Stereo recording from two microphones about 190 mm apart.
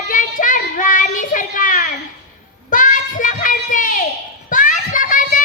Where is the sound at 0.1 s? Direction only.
45° left (ahead or behind).